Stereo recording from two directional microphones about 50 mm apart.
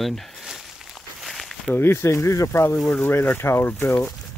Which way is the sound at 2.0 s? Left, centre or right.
Left.